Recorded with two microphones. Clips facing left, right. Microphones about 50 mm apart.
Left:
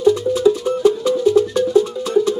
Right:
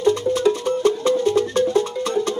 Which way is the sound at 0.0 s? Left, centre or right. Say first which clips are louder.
Left 3 dB; right.